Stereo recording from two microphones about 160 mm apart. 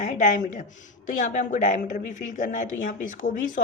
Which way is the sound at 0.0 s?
55° left (ahead or behind).